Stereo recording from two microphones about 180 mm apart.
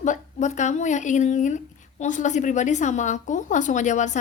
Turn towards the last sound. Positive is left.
turn(degrees=40)  # may be behind; listen again after turning